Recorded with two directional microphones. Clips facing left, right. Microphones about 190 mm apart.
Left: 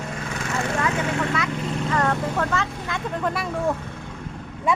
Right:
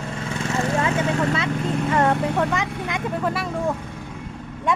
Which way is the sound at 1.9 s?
20° right (ahead or behind).